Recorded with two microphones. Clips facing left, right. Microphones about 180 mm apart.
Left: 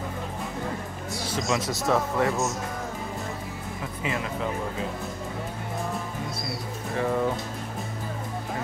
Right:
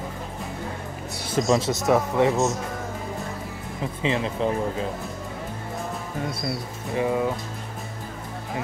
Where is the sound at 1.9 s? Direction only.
15° right (ahead or behind).